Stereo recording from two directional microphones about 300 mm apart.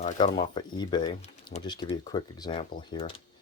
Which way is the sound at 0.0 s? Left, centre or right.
Centre.